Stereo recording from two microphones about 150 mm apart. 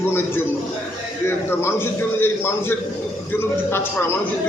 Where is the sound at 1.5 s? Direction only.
15° left (ahead or behind).